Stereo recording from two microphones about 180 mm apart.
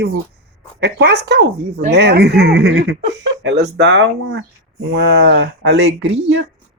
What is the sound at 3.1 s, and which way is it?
Speech, 90° right.